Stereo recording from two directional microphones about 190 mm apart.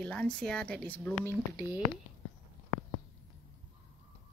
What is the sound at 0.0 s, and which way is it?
A woman's voice, 5° left (ahead or behind).